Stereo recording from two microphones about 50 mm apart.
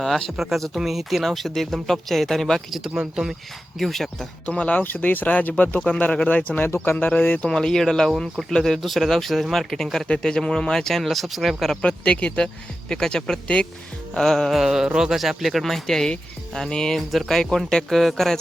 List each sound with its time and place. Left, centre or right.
0.0 s speech: centre
2.9 s speech: centre
3.8 s speech: centre
4.4 s speech: left
4.8 s speech: left
7.5 s speech: centre
10.1 s speech: centre
11.8 s speech: left
14.5 s speech: centre